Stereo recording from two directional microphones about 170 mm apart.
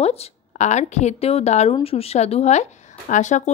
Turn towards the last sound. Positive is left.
turn(degrees=45)  # may be behind; listen again after turning